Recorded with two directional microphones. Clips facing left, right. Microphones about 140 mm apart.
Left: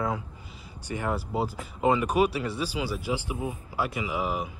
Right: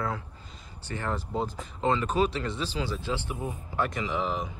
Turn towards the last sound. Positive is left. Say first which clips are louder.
# even
turn(degrees=10)  # may be behind; listen again after turning